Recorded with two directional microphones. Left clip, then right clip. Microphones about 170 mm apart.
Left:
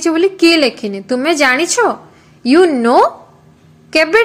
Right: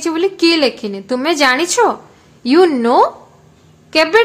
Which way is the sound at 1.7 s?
10° left (ahead or behind).